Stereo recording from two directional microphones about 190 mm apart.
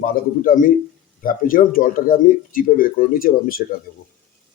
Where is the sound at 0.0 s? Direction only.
45° left (ahead or behind).